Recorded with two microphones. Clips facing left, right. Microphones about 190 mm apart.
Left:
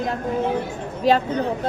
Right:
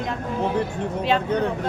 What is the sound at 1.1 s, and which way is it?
Speech, 40° left (ahead or behind).